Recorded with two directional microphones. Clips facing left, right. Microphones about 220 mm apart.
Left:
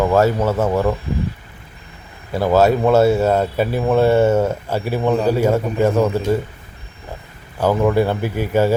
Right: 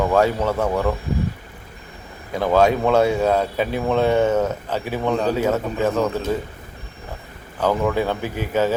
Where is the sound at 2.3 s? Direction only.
5° left (ahead or behind).